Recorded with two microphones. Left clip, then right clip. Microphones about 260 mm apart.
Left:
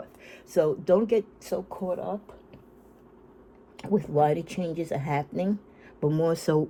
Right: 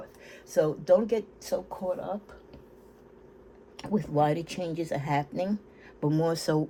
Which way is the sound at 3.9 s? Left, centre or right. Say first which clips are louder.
Left 3 dB; left.